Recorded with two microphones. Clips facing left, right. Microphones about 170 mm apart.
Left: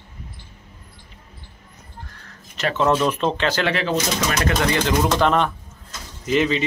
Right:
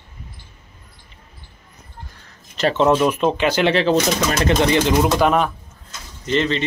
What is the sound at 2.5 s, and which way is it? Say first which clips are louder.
Speech: right 4 dB; 30° right (ahead or behind).